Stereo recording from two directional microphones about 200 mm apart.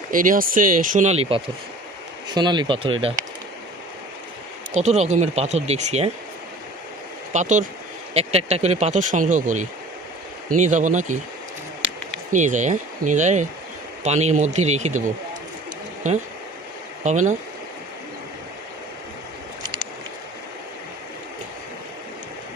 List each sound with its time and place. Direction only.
0.1 s speech: 45° right (ahead or behind); by 2.9 s 25° right (ahead or behind)
4.7 s speech: 35° right (ahead or behind)
7.3 s speech: 40° right (ahead or behind)
12.3 s speech: 40° right (ahead or behind)
17.0 s speech: 35° right (ahead or behind)